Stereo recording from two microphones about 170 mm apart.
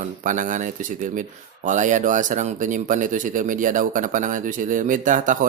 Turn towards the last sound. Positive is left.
turn(degrees=-50)  # may be behind; listen again after turning